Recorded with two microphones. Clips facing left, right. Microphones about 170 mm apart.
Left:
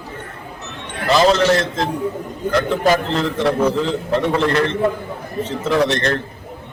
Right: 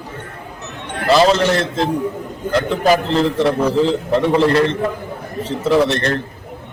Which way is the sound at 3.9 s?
Centre (ahead or behind).